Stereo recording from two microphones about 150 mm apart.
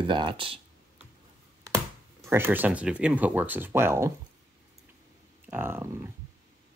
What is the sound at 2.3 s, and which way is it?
Speech, 15° right (ahead or behind).